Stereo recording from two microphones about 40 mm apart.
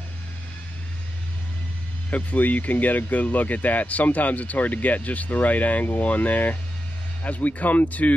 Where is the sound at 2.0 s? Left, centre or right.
Left.